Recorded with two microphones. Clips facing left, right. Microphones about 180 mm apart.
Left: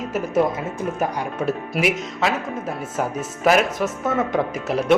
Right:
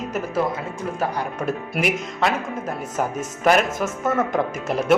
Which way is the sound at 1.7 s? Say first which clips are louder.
Left 1 dB; centre (ahead or behind).